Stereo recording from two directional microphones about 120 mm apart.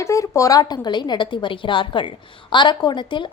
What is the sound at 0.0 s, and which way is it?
A woman's voice, 25° left (ahead or behind).